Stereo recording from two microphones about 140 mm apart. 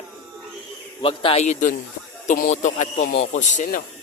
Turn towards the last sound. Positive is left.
turn(degrees=60)  # may be behind; listen again after turning